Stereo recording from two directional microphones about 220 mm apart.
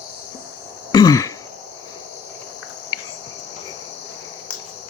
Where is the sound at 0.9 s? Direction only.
15° left (ahead or behind).